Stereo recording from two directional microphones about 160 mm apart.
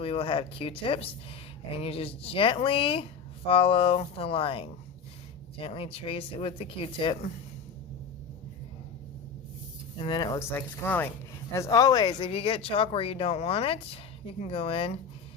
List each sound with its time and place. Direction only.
0.0 s speech: 35° left (ahead or behind)
10.0 s speech: 25° left (ahead or behind)
10.5 s speech: 10° left (ahead or behind); by 15.0 s 35° left (ahead or behind)